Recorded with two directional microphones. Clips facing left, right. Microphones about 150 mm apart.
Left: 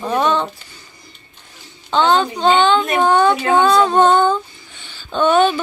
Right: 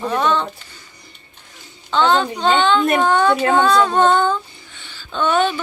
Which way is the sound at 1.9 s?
20° left (ahead or behind).